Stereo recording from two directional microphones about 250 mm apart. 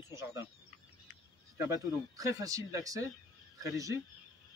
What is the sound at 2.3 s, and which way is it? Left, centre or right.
Speech, centre.